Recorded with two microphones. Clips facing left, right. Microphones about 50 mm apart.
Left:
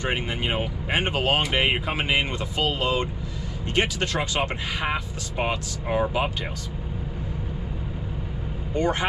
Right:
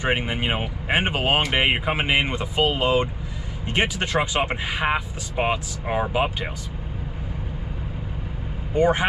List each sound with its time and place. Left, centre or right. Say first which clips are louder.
0.0 s speech: right 3 dB; centre
8.7 s speech: right 5 dB; centre